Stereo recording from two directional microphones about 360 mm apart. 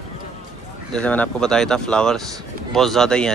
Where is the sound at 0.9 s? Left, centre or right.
Centre.